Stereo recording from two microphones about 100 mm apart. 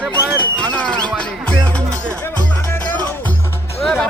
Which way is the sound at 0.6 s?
10° left (ahead or behind).